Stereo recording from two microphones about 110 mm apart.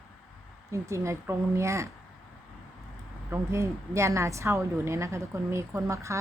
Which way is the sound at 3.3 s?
25° right (ahead or behind).